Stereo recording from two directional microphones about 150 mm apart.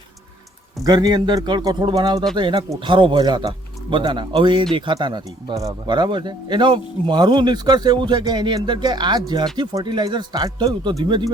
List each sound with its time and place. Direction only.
0.9 s speech: 30° right (ahead or behind)